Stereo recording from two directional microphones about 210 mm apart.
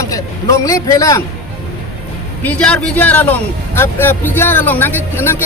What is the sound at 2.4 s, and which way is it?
A man's voice, 5° left (ahead or behind).